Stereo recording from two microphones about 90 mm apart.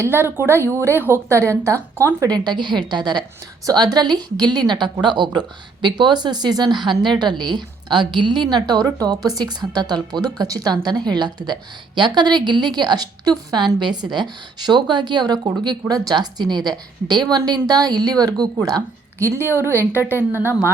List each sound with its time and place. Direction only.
0.0 s a woman's voice: 25° right (ahead or behind)
2.2 s a woman's voice: 50° right (ahead or behind)
19.2 s a woman's voice: 25° right (ahead or behind)